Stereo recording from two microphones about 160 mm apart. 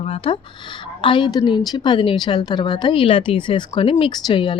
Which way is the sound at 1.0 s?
30° left (ahead or behind).